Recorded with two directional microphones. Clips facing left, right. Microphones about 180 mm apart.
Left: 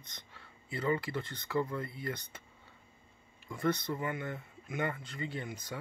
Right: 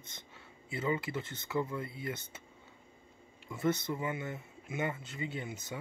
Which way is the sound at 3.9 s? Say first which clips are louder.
Even; 10° right (ahead or behind).